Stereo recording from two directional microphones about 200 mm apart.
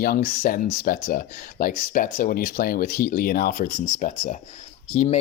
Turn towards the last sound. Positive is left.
turn(degrees=35)  # may be behind; listen again after turning